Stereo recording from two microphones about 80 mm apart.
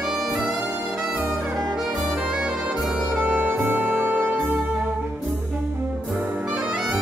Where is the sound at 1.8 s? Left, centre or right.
Centre.